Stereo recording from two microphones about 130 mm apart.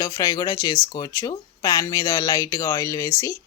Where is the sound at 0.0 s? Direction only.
25° left (ahead or behind).